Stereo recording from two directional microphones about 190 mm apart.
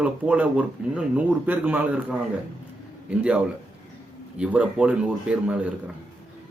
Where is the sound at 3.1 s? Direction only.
5° right (ahead or behind).